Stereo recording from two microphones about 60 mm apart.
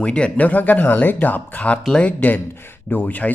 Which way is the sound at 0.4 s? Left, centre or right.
Left.